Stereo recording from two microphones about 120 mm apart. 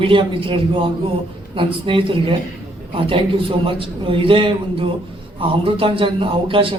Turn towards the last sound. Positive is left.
turn(degrees=-45)  # may be behind; listen again after turning